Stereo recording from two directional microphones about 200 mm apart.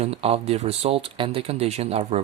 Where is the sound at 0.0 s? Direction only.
30° right (ahead or behind).